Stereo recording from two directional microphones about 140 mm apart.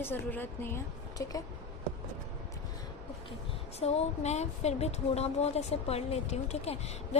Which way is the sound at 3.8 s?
50° left (ahead or behind).